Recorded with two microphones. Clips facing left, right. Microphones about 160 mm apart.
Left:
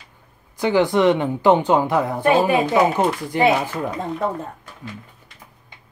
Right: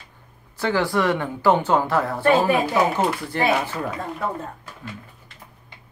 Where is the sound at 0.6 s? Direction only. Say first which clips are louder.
Left 5 dB; 20° left (ahead or behind).